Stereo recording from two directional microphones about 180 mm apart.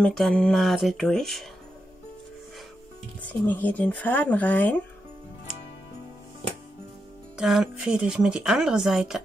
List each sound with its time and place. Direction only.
0.0 s speech: 5° left (ahead or behind)
3.2 s speech: 10° left (ahead or behind)
7.3 s speech: 5° right (ahead or behind)